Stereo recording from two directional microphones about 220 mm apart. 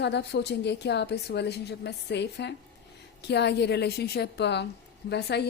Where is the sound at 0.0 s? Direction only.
50° left (ahead or behind).